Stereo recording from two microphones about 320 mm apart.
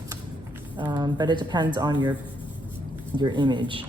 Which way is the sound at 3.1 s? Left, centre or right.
Centre.